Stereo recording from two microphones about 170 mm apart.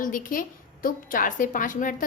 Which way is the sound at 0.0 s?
55° left (ahead or behind).